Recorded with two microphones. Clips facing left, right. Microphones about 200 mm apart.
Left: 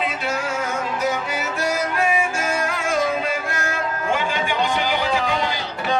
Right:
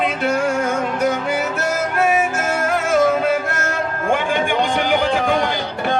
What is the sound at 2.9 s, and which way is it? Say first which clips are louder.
Music: right 7 dB; 55° right (ahead or behind).